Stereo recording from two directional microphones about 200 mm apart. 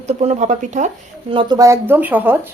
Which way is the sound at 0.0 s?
35° right (ahead or behind).